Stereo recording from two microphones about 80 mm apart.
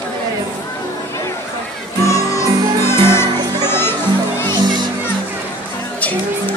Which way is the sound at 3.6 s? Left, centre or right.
Left.